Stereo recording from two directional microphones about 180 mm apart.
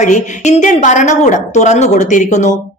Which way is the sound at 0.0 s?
40° left (ahead or behind).